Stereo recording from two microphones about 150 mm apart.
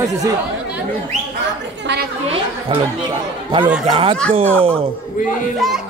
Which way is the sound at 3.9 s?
35° right (ahead or behind).